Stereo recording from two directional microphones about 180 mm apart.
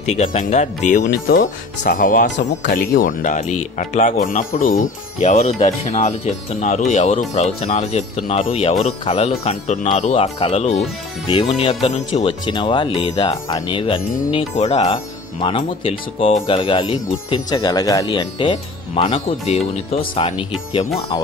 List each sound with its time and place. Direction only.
0.1 s speech: 40° left (ahead or behind)